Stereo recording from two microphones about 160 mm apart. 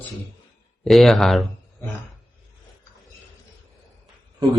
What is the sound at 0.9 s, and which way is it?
Speech, centre (ahead or behind).